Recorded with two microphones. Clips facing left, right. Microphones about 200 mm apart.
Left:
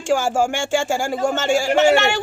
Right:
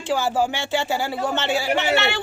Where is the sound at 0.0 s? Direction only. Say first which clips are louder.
Left 3 dB; 45° left (ahead or behind).